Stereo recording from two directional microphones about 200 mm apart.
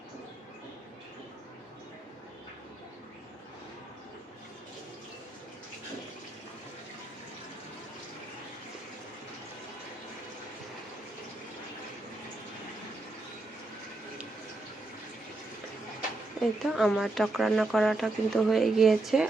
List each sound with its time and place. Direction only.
16.4 s speech: centre (ahead or behind)